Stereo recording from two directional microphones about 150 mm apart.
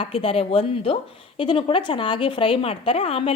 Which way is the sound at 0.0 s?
35° left (ahead or behind).